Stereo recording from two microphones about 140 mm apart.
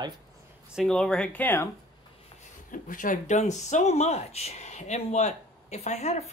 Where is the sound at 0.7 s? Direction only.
Centre (ahead or behind).